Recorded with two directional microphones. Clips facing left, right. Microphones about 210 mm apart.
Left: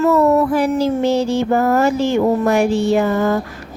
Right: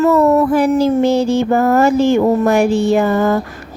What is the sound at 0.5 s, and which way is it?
Music, 50° right (ahead or behind).